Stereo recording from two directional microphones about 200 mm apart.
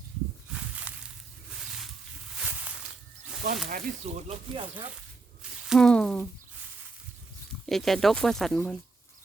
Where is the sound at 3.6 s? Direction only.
40° right (ahead or behind).